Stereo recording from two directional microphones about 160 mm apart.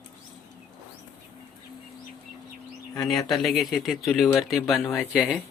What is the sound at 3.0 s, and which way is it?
Speech, centre (ahead or behind).